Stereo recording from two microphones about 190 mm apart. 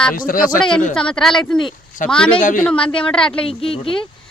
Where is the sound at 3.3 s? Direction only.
30° left (ahead or behind).